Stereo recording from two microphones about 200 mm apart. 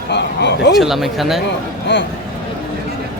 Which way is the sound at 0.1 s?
60° left (ahead or behind).